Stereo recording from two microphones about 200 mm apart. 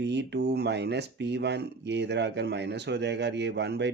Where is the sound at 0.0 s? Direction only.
60° right (ahead or behind).